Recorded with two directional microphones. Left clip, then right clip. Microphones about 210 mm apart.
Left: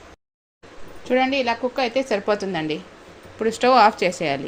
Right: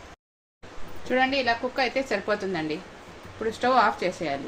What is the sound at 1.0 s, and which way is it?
A woman's voice, 30° left (ahead or behind).